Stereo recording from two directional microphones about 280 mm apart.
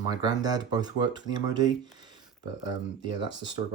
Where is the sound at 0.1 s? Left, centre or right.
Centre.